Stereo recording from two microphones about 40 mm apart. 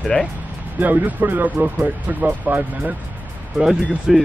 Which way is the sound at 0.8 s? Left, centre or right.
Right.